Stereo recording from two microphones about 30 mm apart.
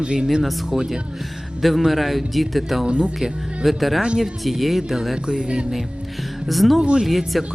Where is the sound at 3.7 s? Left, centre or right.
Centre.